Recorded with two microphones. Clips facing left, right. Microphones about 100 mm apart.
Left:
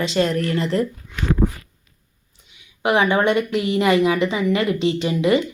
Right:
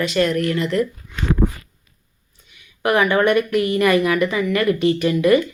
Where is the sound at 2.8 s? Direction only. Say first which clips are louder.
Right 1 dB; 20° left (ahead or behind).